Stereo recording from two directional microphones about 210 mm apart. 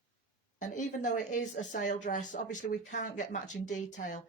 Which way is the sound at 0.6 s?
35° left (ahead or behind).